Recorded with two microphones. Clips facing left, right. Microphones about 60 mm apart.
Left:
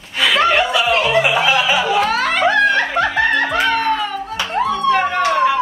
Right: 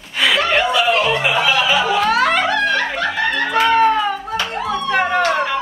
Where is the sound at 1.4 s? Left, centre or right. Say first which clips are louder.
Even; centre.